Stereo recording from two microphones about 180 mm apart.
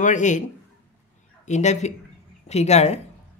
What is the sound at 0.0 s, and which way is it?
Speech, 45° left (ahead or behind).